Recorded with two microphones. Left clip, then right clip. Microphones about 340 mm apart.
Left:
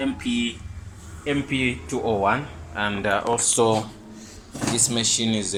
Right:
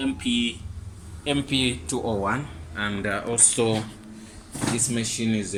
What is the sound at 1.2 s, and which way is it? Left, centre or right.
Speech, centre.